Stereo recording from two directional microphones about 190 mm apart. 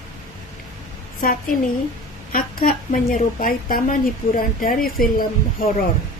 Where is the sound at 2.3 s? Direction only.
50° left (ahead or behind).